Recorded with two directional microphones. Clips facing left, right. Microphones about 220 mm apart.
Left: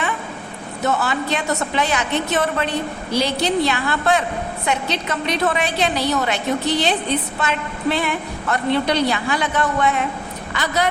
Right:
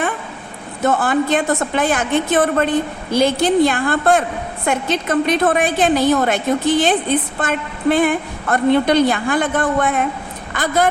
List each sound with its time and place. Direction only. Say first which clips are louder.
0.9 s a woman's voice: right 5 dB; 50° right (ahead or behind)